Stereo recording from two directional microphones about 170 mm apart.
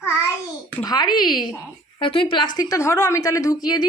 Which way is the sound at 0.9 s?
25° left (ahead or behind).